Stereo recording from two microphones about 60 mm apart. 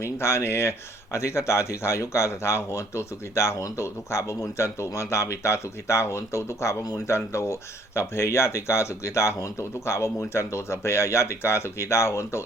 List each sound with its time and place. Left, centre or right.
0.0 s speech: left